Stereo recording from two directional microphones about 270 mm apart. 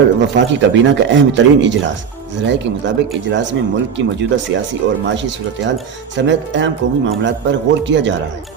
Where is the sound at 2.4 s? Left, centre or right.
Right.